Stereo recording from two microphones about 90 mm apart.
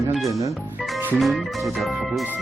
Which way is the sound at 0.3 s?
40° right (ahead or behind).